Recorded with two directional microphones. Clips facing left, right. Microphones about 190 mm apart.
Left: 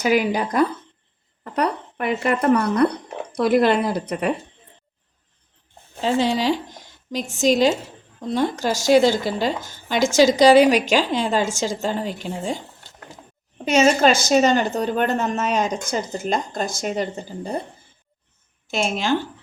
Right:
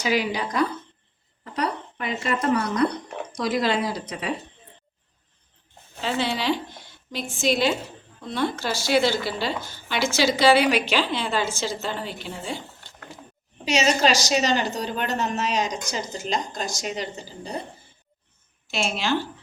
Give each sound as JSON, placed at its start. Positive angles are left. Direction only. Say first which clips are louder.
{"t": 0.0, "sound": "a woman's voice", "louder": "left 5 dB", "side_deg": 50}
{"t": 6.0, "sound": "a woman's voice", "louder": "left 6 dB", "side_deg": 40}
{"t": 13.7, "sound": "a woman's voice", "louder": "left 5 dB", "side_deg": 50}
{"t": 18.7, "sound": "a woman's voice", "louder": "left 3 dB", "side_deg": 45}